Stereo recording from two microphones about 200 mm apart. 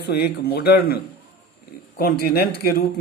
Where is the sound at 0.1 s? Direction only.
55° left (ahead or behind).